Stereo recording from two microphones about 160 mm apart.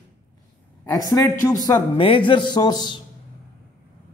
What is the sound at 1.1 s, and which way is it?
Speech, 20° left (ahead or behind).